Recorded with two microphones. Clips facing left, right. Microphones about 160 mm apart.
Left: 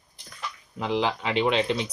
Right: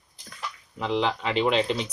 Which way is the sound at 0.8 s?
5° left (ahead or behind).